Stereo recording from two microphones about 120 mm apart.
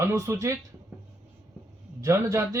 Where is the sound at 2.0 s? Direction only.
25° right (ahead or behind).